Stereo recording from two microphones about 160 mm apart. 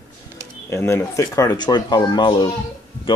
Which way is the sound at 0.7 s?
15° left (ahead or behind).